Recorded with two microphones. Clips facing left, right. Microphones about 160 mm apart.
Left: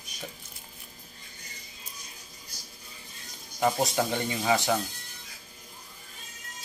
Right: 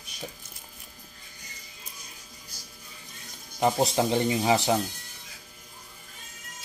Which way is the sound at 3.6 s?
25° right (ahead or behind).